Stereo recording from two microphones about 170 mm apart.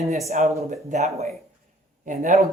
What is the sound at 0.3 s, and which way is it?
Speech, 45° right (ahead or behind).